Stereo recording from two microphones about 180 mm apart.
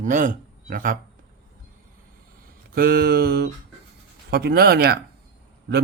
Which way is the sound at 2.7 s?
55° right (ahead or behind).